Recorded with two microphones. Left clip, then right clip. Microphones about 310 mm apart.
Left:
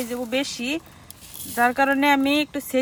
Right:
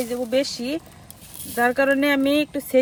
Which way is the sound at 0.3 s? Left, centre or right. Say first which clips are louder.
Right 2 dB; centre.